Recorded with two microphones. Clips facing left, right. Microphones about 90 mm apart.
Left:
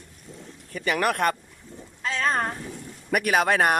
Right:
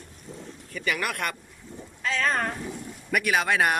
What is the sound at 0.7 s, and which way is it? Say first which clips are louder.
Speech: left 5 dB; 35° left (ahead or behind).